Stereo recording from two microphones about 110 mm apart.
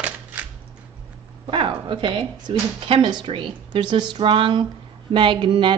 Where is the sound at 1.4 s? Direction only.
50° right (ahead or behind).